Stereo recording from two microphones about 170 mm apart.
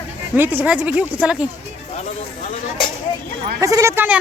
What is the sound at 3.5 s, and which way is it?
Speech, 20° right (ahead or behind).